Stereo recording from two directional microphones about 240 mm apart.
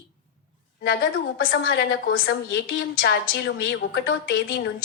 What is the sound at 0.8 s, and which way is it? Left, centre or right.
A woman's voice, left.